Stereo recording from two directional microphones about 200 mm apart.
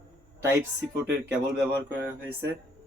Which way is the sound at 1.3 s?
10° right (ahead or behind).